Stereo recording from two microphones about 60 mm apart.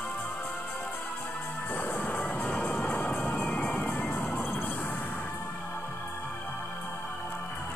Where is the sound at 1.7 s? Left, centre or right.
Left.